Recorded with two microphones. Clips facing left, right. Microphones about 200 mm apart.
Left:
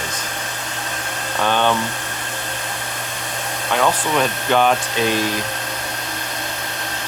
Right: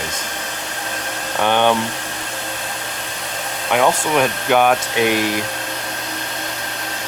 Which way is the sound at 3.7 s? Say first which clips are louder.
Right 3 dB; 15° right (ahead or behind).